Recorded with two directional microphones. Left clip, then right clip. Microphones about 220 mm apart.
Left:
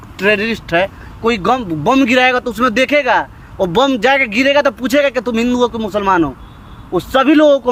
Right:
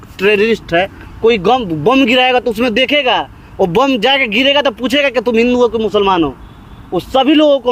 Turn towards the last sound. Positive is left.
turn(degrees=0)  # may be behind; listen again after turning